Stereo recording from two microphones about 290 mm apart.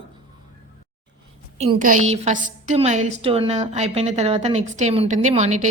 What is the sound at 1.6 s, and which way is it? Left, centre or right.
A woman's voice, right.